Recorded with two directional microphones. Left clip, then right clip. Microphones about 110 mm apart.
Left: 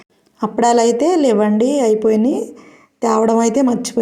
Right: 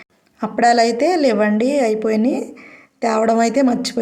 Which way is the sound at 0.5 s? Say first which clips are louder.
Left 1 dB; 35° left (ahead or behind).